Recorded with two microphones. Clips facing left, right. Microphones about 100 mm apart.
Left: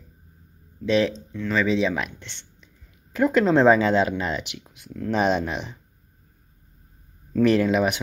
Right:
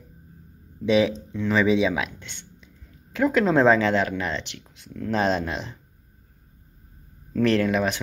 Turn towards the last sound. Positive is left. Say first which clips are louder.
# left 2 dB
turn(degrees=10)  # may be behind; listen again after turning